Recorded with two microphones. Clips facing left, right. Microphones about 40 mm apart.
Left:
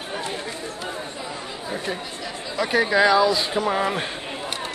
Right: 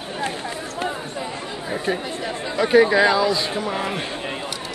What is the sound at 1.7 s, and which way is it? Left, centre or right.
Speech, right.